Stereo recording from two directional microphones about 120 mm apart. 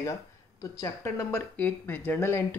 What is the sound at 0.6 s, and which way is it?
Speech, 25° left (ahead or behind).